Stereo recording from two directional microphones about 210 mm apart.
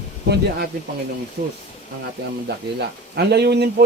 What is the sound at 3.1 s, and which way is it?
Speech, 50° right (ahead or behind).